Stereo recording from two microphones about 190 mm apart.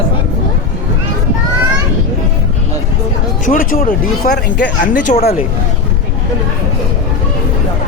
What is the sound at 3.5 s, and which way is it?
Speech, 45° left (ahead or behind).